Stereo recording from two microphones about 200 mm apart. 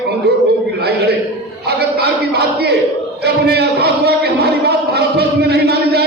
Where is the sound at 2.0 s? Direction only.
55° right (ahead or behind).